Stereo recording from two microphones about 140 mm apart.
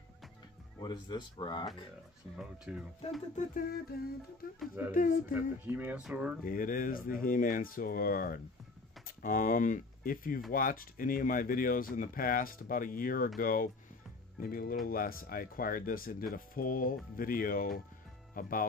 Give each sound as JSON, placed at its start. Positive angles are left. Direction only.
{"t": 0.7, "sound": "speech", "side_deg": 30}
{"t": 2.3, "sound": "speech", "side_deg": -5}
{"t": 3.3, "sound": "speech", "side_deg": 85}
{"t": 4.9, "sound": "speech", "side_deg": 80}
{"t": 5.3, "sound": "speech", "side_deg": -15}
{"t": 6.4, "sound": "speech", "side_deg": 80}
{"t": 9.0, "sound": "speech", "side_deg": 75}